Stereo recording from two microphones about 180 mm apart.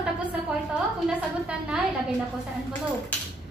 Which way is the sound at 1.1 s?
5° right (ahead or behind).